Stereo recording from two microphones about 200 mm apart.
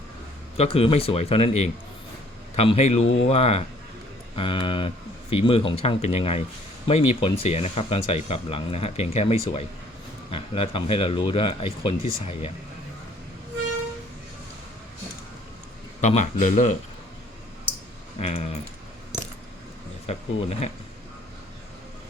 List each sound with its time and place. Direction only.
0.5 s a man's voice: 30° left (ahead or behind)
16.0 s a man's voice: 35° left (ahead or behind)
18.2 s a man's voice: 30° left (ahead or behind)
20.1 s a man's voice: 35° left (ahead or behind)